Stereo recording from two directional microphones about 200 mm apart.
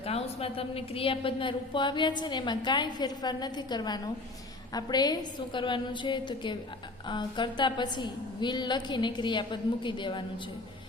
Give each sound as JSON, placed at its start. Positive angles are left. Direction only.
{"t": 0.0, "sound": "a woman's voice", "side_deg": 30}